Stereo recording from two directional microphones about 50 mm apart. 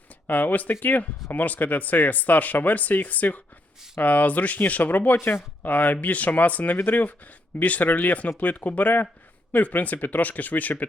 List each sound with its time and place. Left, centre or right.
0.3 s speech: left
5.1 s speech: left
5.6 s speech: left